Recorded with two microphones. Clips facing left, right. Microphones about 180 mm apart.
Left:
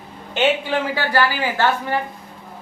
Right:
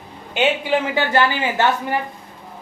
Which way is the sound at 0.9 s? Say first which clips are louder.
Right 2 dB; 20° right (ahead or behind).